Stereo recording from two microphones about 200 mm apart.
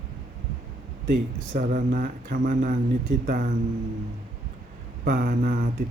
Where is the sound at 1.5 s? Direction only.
45° right (ahead or behind).